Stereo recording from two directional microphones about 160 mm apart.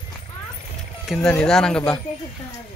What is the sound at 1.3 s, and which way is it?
Speech, 5° left (ahead or behind).